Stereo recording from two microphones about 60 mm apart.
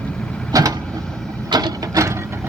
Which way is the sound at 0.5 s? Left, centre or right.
Right.